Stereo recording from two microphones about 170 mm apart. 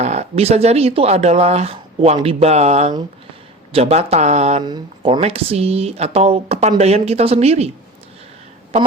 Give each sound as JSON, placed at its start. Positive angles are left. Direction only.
{"t": 0.0, "sound": "speech", "side_deg": -40}
{"t": 4.6, "sound": "speech", "side_deg": -25}
{"t": 5.2, "sound": "speech", "side_deg": -35}